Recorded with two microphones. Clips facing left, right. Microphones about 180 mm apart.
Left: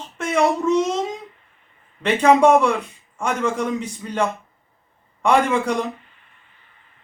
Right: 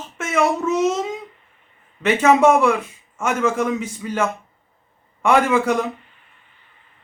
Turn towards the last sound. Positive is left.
turn(degrees=-5)  # may be behind; listen again after turning